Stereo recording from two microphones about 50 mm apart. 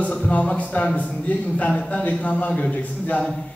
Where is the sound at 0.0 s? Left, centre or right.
Left.